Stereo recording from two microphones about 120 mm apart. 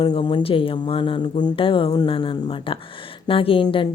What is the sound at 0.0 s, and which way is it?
Speech, 45° left (ahead or behind).